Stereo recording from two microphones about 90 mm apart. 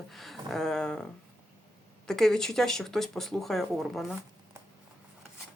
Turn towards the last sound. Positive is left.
turn(degrees=0)  # may be behind; listen again after turning